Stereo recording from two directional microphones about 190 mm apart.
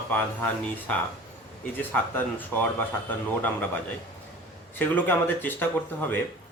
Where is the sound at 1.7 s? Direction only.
10° left (ahead or behind).